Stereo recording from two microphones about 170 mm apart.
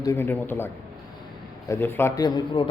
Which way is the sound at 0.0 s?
15° left (ahead or behind).